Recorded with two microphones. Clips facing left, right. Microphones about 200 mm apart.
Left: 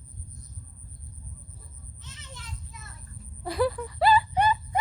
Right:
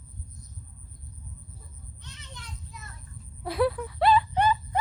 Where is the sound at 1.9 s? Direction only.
Centre (ahead or behind).